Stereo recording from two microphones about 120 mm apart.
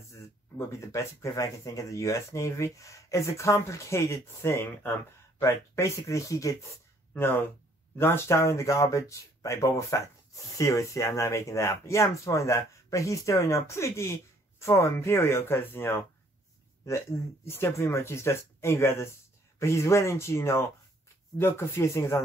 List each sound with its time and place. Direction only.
0.1 s speech: 25° left (ahead or behind)
7.2 s speech: 15° left (ahead or behind)
17.5 s speech: 20° left (ahead or behind)